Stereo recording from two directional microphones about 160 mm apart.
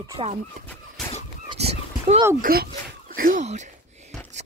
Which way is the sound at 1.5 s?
40° right (ahead or behind).